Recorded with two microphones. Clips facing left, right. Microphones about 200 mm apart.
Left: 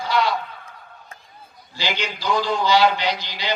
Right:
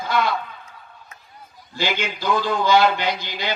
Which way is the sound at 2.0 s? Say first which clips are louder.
Left 1 dB; 55° right (ahead or behind).